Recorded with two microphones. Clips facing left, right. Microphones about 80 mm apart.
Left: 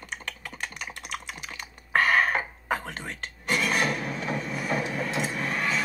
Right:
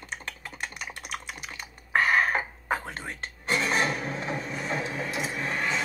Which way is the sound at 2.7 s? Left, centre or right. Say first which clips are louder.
Even; right.